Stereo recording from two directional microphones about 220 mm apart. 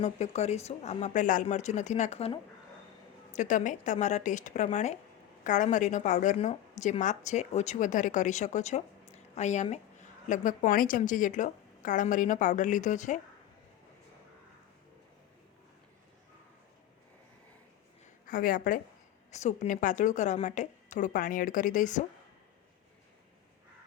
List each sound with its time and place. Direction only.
0.0 s a woman's voice: 30° left (ahead or behind)
18.3 s a woman's voice: 40° left (ahead or behind)